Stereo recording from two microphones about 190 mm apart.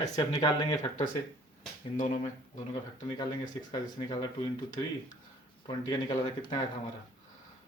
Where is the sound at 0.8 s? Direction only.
40° left (ahead or behind).